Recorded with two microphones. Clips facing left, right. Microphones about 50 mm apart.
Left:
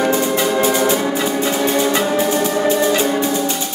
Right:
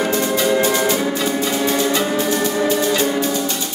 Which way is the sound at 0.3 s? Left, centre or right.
Centre.